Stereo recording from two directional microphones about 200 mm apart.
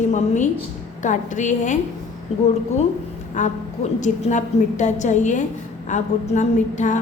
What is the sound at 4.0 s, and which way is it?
A woman's voice, 35° left (ahead or behind).